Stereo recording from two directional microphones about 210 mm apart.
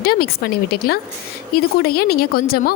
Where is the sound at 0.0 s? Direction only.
45° left (ahead or behind).